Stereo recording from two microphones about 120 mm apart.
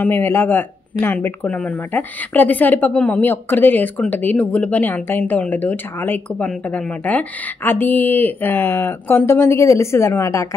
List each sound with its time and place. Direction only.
0.0 s speech: 15° left (ahead or behind)